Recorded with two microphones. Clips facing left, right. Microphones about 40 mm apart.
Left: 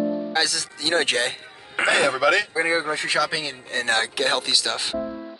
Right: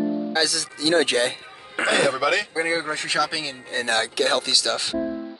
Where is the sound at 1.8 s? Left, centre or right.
Centre.